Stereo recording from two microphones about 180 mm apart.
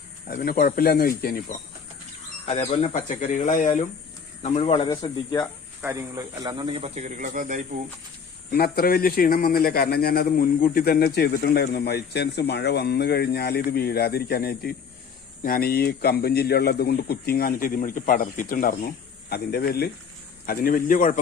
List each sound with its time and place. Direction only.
0.3 s speech: 55° left (ahead or behind)
2.5 s speech: 35° left (ahead or behind)
5.8 s speech: 15° right (ahead or behind); by 7.8 s 45° right (ahead or behind)
8.5 s speech: 60° left (ahead or behind)